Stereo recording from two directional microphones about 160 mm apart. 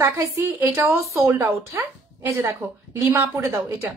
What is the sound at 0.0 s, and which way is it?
Speech, 15° right (ahead or behind).